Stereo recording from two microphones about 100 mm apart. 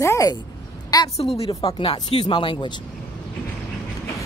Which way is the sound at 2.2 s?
55° left (ahead or behind).